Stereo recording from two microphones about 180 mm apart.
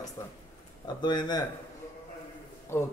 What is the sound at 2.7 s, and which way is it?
Speech, 15° left (ahead or behind).